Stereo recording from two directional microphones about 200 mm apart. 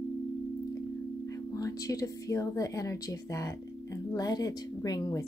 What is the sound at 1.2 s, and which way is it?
Speech, 15° left (ahead or behind).